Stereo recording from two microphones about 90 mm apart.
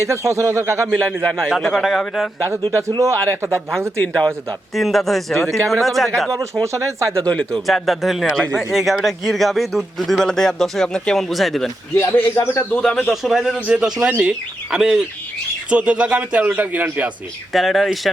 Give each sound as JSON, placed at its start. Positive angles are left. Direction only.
{"t": 0.0, "sound": "a man's voice", "side_deg": -35}
{"t": 0.9, "sound": "a man's voice", "side_deg": 10}
{"t": 3.0, "sound": "a man's voice", "side_deg": -35}
{"t": 4.0, "sound": "speech", "side_deg": 15}
{"t": 4.7, "sound": "a man's voice", "side_deg": 0}
{"t": 6.3, "sound": "a man's voice", "side_deg": -35}
{"t": 7.3, "sound": "speech", "side_deg": 15}
{"t": 7.7, "sound": "a man's voice", "side_deg": 0}
{"t": 12.3, "sound": "speech", "side_deg": 30}
{"t": 12.7, "sound": "speech", "side_deg": 10}
{"t": 13.1, "sound": "a man's voice", "side_deg": -5}
{"t": 17.5, "sound": "a man's voice", "side_deg": 0}